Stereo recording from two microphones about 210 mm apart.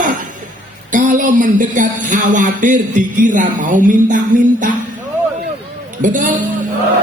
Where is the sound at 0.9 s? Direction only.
40° right (ahead or behind).